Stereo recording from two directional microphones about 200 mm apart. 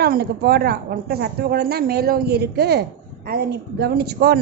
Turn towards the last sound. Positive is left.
turn(degrees=-50)  # may be behind; listen again after turning